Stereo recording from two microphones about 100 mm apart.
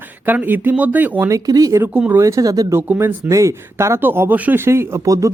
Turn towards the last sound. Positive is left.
turn(degrees=-30)  # may be behind; listen again after turning